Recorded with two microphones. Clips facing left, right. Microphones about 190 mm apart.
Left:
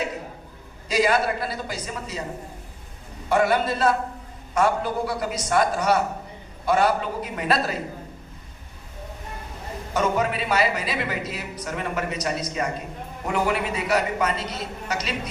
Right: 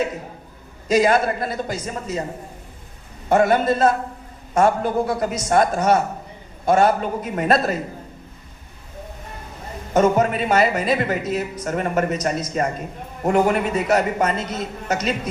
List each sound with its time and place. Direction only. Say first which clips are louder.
0.9 s speech: right 4 dB; 45° right (ahead or behind)
3.2 s speech: right 4 dB; 45° right (ahead or behind)
9.9 s speech: right 6 dB; 45° right (ahead or behind)